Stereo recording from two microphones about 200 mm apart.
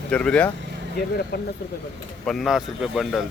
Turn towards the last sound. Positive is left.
turn(degrees=0)  # may be behind; listen again after turning